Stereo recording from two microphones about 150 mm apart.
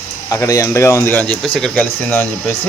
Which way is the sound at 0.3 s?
20° left (ahead or behind).